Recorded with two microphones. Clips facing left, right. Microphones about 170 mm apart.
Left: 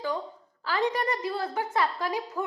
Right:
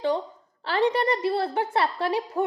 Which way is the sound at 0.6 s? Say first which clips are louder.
Right 4 dB; 30° right (ahead or behind).